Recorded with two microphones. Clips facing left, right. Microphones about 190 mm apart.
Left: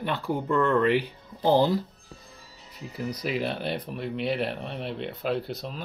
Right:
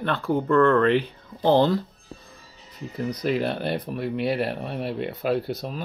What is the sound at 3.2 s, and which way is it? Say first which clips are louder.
Speech: right 5 dB; centre (ahead or behind).